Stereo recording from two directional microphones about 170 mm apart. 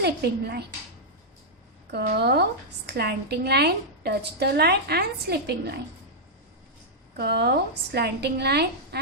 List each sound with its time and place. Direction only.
0.0 s a woman's voice: 70° right (ahead or behind)
1.9 s a woman's voice: 75° right (ahead or behind)
7.2 s a woman's voice: 75° right (ahead or behind)